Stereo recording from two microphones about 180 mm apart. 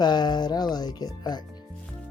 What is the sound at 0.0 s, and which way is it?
Speech, 25° left (ahead or behind).